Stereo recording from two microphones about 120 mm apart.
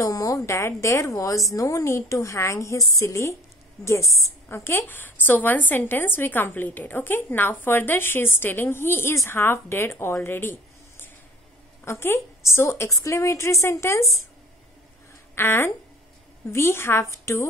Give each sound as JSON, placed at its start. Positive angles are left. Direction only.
{"t": 0.0, "sound": "a sound", "side_deg": 30}
{"t": 0.5, "sound": "a woman's voice", "side_deg": 25}
{"t": 4.0, "sound": "a woman's voice", "side_deg": 0}
{"t": 4.5, "sound": "a woman's voice", "side_deg": 20}
{"t": 15.3, "sound": "a woman's voice", "side_deg": 20}